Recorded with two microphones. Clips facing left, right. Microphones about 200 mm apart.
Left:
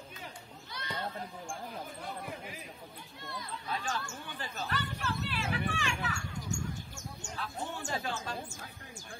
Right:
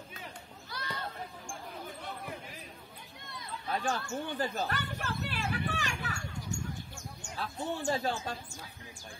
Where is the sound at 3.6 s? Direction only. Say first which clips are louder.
Right 4 dB; 50° right (ahead or behind).